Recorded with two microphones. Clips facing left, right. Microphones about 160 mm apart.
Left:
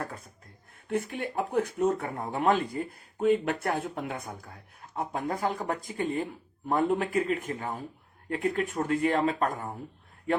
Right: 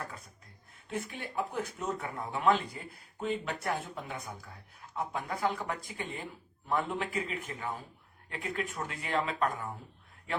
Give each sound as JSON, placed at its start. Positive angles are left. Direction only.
{"t": 0.9, "sound": "speech", "side_deg": 55}